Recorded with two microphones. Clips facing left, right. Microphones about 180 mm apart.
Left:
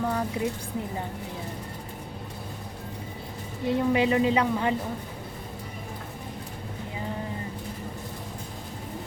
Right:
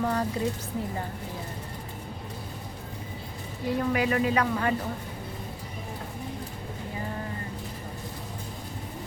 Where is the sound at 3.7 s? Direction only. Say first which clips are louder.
Left 3 dB; 25° left (ahead or behind).